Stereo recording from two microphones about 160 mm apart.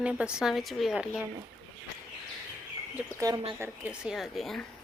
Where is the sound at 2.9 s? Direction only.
20° right (ahead or behind); by 4.6 s centre (ahead or behind).